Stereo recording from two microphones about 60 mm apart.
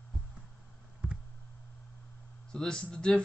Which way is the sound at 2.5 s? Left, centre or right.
Centre.